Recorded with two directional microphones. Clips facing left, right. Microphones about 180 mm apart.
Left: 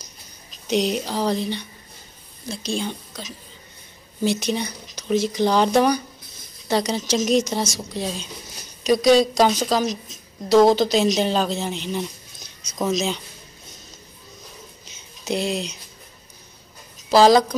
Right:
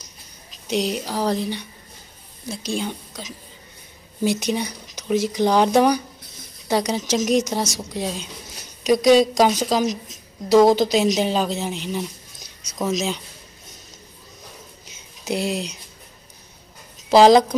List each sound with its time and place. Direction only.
0.7 s speech: 5° right (ahead or behind)
15.2 s speech: 10° right (ahead or behind)
17.1 s speech: 20° right (ahead or behind)